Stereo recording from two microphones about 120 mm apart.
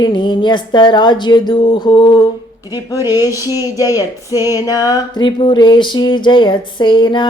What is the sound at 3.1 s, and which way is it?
Speech, 30° left (ahead or behind).